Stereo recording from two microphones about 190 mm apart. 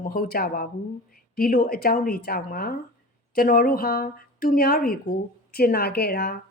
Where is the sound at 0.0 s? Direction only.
50° left (ahead or behind).